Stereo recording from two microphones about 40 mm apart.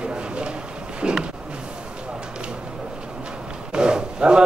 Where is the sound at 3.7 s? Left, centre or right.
Right.